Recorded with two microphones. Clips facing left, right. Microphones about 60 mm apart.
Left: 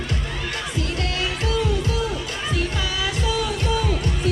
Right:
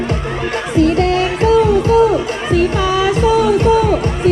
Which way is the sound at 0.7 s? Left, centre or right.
Right.